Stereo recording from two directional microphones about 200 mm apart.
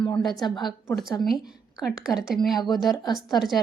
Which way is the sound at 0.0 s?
Centre (ahead or behind).